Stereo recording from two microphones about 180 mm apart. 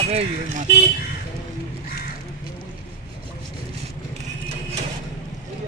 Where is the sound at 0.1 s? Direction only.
40° right (ahead or behind).